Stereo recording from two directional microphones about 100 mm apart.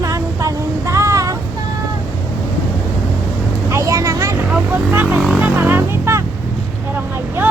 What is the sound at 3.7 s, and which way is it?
Vehicle, 30° right (ahead or behind).